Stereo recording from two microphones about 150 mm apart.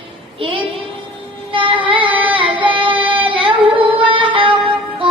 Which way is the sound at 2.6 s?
35° right (ahead or behind).